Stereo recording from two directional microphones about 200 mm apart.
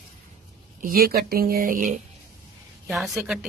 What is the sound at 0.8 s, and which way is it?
Speech, 45° right (ahead or behind).